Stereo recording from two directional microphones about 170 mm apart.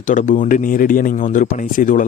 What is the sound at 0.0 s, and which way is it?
Speech, 50° left (ahead or behind).